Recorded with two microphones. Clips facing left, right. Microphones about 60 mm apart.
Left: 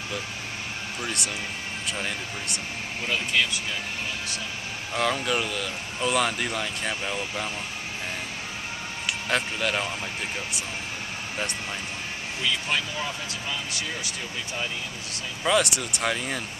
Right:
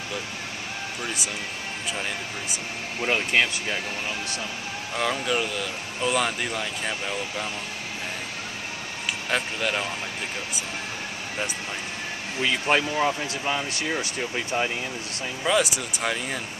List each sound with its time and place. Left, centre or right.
1.0 s speech: centre
3.1 s speech: right
4.9 s speech: centre
9.3 s speech: centre
12.4 s speech: right
15.4 s speech: centre